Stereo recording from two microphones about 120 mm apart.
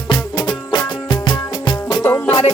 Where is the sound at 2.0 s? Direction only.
20° left (ahead or behind).